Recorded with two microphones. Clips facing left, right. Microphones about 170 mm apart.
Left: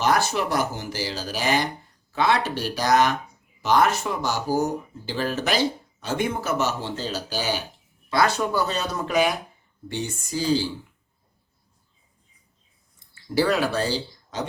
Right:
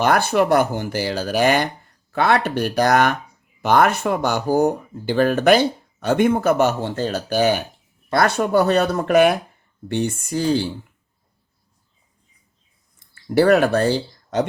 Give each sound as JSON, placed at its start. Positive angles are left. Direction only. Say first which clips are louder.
{"t": 0.0, "sound": "speech", "louder": "right 5 dB", "side_deg": -55}
{"t": 13.3, "sound": "speech", "louder": "right 7 dB", "side_deg": -55}